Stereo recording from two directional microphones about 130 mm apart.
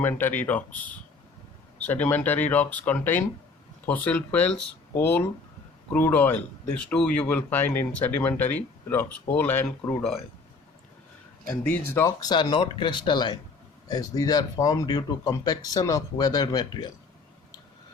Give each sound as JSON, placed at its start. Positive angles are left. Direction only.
{"t": 0.0, "sound": "speech", "side_deg": 15}
{"t": 11.4, "sound": "speech", "side_deg": 15}
{"t": 12.0, "sound": "speech", "side_deg": 30}